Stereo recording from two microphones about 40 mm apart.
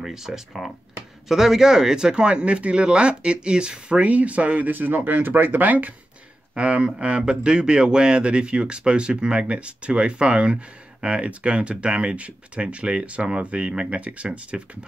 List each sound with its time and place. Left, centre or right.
0.0 s speech: centre; by 4.6 s right
4.6 s speech: right
6.5 s speech: right